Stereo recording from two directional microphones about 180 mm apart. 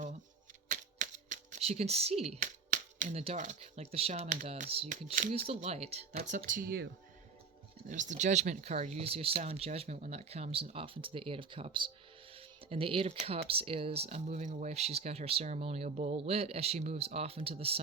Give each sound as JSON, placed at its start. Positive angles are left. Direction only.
{"t": 0.7, "sound": "typewriter", "side_deg": -45}
{"t": 2.3, "sound": "speech", "side_deg": -45}
{"t": 7.9, "sound": "speech", "side_deg": -45}